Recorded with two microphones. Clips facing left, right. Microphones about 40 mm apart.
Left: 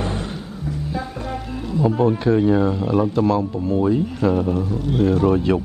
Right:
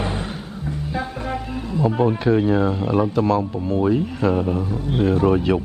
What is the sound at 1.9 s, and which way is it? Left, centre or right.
Speech, centre.